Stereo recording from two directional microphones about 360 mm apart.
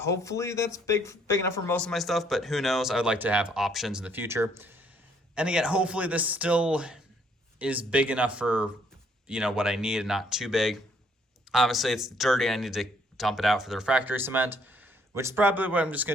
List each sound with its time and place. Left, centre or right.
0.0 s speech: centre